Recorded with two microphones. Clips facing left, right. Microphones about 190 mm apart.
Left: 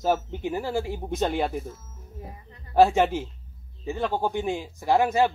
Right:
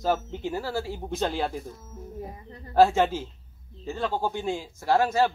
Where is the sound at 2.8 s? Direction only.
15° left (ahead or behind).